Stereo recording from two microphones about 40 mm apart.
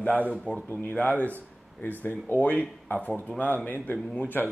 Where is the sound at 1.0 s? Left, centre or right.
Left.